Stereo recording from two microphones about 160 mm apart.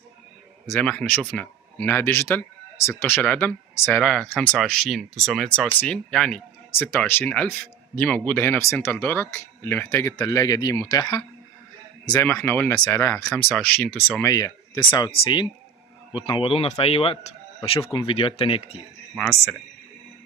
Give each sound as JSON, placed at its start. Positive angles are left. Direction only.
{"t": 0.7, "sound": "speech", "side_deg": 10}